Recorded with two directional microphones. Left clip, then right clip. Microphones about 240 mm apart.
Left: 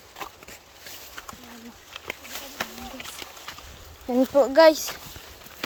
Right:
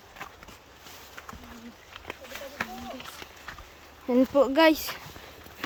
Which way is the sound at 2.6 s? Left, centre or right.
Left.